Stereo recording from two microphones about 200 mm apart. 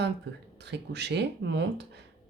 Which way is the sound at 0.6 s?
60° right (ahead or behind).